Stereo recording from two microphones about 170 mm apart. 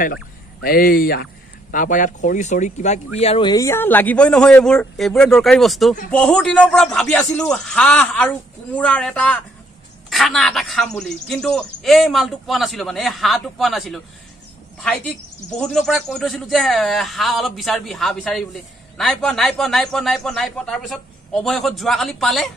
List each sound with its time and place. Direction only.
0.0 s speech: 65° left (ahead or behind); by 14.0 s centre (ahead or behind)
15.5 s speech: centre (ahead or behind)